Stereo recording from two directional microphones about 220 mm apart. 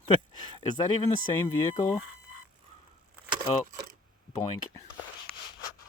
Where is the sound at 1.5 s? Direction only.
15° left (ahead or behind).